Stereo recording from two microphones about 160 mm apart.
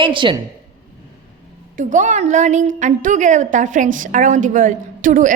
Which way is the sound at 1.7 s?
50° right (ahead or behind).